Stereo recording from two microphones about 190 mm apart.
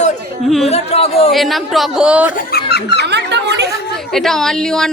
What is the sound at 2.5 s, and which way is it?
Speech, 60° left (ahead or behind).